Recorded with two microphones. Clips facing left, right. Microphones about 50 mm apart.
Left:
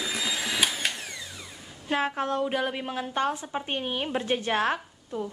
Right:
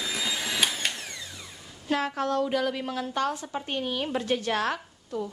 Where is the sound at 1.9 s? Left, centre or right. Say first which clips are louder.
Even; left.